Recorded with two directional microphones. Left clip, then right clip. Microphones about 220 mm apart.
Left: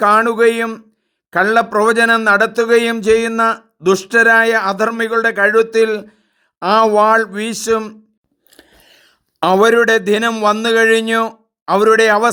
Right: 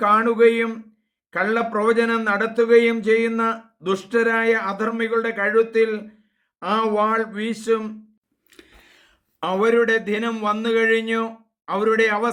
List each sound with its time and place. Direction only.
0.0 s a man's voice: 50° left (ahead or behind)